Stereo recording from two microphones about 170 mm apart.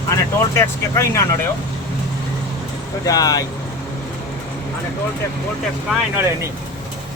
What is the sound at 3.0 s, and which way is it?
Speech, 20° left (ahead or behind).